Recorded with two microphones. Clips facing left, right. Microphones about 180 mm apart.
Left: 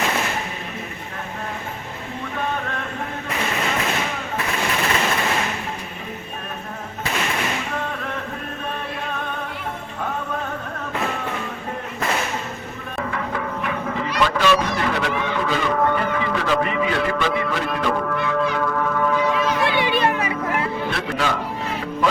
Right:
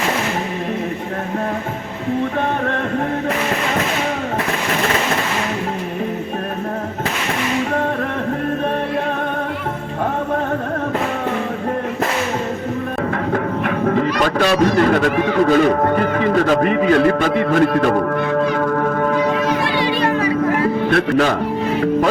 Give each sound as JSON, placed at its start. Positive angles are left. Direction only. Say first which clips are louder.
{"t": 13.3, "sound": "music", "louder": "right 6 dB", "side_deg": -50}
{"t": 20.9, "sound": "speech", "louder": "right 10 dB", "side_deg": -50}